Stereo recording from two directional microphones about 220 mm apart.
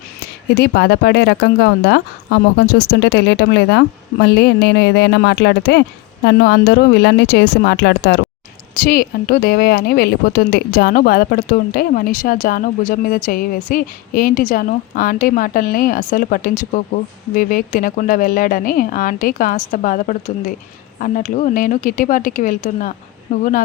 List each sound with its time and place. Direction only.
0.5 s speech: 50° left (ahead or behind)